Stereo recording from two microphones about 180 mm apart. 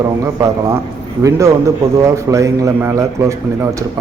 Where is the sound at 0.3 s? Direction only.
15° right (ahead or behind).